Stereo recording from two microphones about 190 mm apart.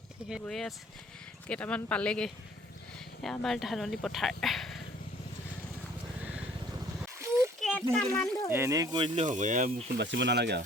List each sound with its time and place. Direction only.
0.3 s speech: centre (ahead or behind)
7.2 s a sound: 15° right (ahead or behind)
7.6 s a sound: centre (ahead or behind)
7.9 s speech: centre (ahead or behind)
8.4 s speech: 15° right (ahead or behind)
9.2 s speech: 40° right (ahead or behind)
10.0 s speech: 65° right (ahead or behind)